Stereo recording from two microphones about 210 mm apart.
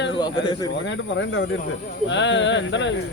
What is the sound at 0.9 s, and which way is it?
Speech, 60° left (ahead or behind).